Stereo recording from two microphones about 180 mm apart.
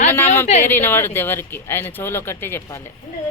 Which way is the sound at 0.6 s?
10° left (ahead or behind).